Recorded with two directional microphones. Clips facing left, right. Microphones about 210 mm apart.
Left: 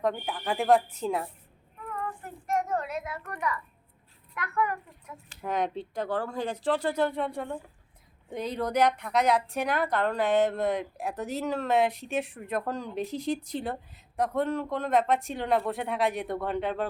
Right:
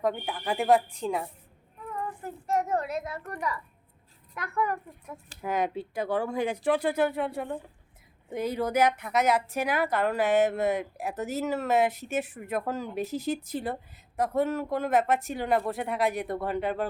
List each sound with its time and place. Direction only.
0.0 s a woman's voice: centre (ahead or behind)
2.2 s a child's voice: 35° right (ahead or behind)
5.4 s a woman's voice: 5° right (ahead or behind)